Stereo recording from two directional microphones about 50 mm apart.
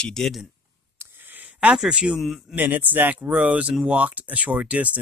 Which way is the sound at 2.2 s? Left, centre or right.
Centre.